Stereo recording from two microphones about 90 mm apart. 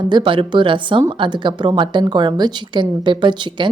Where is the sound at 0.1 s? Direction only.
65° right (ahead or behind).